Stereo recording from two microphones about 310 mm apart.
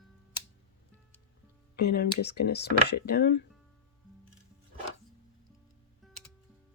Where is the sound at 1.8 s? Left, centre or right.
Left.